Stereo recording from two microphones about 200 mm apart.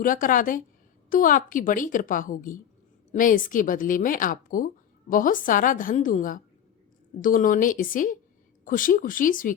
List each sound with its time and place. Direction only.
0.0 s speech: 40° left (ahead or behind)